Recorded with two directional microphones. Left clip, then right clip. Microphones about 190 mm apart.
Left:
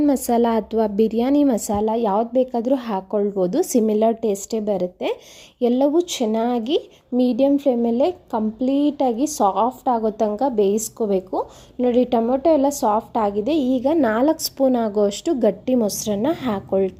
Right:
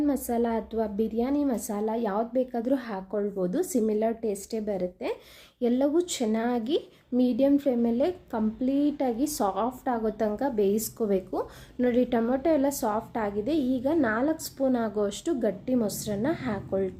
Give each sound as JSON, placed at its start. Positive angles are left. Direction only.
{"t": 0.0, "sound": "a woman's voice", "side_deg": 45}